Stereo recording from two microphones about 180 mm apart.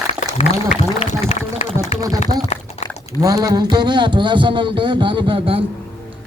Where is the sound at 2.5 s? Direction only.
35° left (ahead or behind).